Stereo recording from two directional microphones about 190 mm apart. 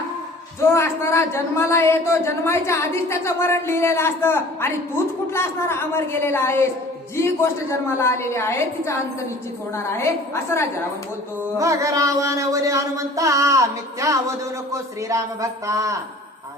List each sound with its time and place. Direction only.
0.6 s speech: 15° left (ahead or behind)
11.5 s music: 15° right (ahead or behind)